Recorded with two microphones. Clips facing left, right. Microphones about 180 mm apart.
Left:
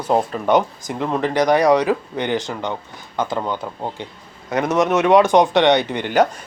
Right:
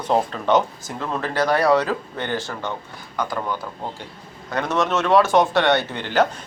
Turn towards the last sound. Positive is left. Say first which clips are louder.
# left 3 dB
turn(degrees=15)  # may be behind; listen again after turning